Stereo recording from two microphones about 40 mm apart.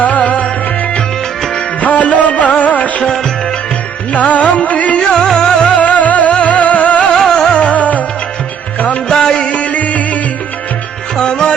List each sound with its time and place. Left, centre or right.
0.0 s music: left
1.8 s music: left
4.1 s music: left
4.9 s music: centre
5.7 s music: left
7.1 s music: centre
7.5 s music: left
9.0 s music: centre
9.4 s music: left
11.2 s music: centre